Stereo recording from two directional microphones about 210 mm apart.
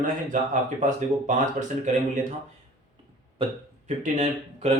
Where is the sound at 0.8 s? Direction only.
35° right (ahead or behind).